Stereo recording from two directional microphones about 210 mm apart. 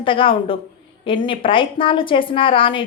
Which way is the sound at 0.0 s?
25° left (ahead or behind).